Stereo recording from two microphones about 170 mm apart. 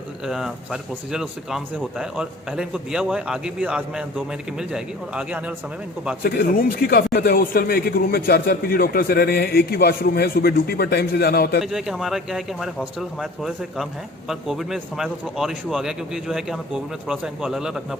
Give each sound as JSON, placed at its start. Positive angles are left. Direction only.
{"t": 0.3, "sound": "speech", "side_deg": 0}
{"t": 6.2, "sound": "a man's voice", "side_deg": 65}
{"t": 11.6, "sound": "speech", "side_deg": 0}